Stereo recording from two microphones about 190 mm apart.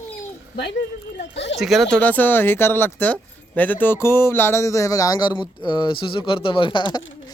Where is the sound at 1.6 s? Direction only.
Centre (ahead or behind).